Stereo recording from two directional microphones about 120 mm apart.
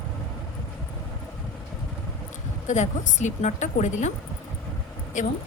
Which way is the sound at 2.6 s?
80° left.